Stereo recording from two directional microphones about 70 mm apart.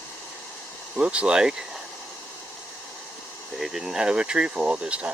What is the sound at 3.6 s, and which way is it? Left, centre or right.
Speech, centre.